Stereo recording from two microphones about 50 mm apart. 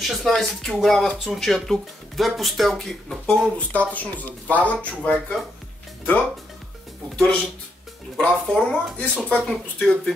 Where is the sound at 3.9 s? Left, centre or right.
Left.